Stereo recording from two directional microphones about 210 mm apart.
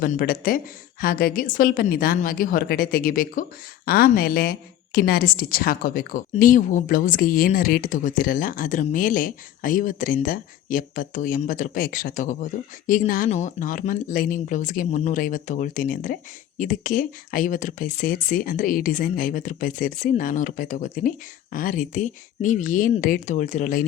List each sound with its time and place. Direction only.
0.0 s a woman's voice: 45° left (ahead or behind)